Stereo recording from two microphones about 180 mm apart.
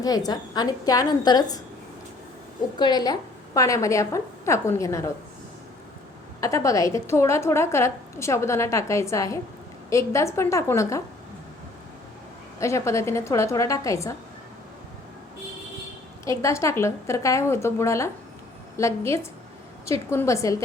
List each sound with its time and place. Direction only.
0.0 s a woman's voice: 20° left (ahead or behind)
2.7 s a woman's voice: 25° left (ahead or behind)
6.4 s a woman's voice: 15° left (ahead or behind)
12.5 s a woman's voice: 15° left (ahead or behind)
16.2 s a woman's voice: 15° left (ahead or behind)